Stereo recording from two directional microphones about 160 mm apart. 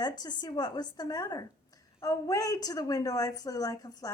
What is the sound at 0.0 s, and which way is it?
A woman's voice, 25° left (ahead or behind).